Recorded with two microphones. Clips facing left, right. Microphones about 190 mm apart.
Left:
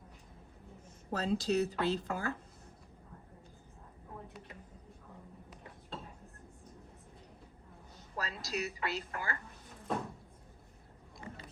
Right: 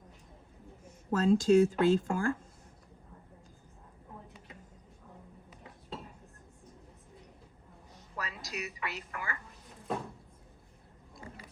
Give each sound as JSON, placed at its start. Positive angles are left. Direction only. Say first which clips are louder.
{"t": 1.1, "sound": "speech", "louder": "right 8 dB", "side_deg": -50}
{"t": 8.1, "sound": "music", "louder": "left 1 dB", "side_deg": 30}
{"t": 8.4, "sound": "a woman's voice", "louder": "left 5 dB", "side_deg": 30}